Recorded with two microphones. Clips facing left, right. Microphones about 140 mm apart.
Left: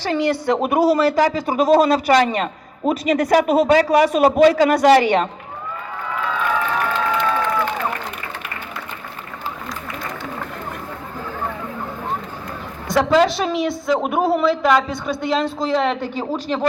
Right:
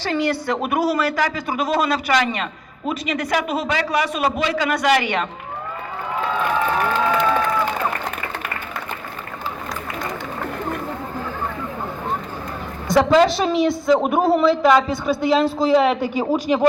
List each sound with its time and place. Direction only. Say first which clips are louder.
0.0 s a woman's voice: left 2 dB; 20° left (ahead or behind); by 5.3 s 35° left (ahead or behind)
12.9 s a woman's voice: right 1 dB; centre (ahead or behind)